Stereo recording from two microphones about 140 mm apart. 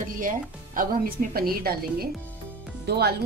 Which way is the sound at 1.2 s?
90° right.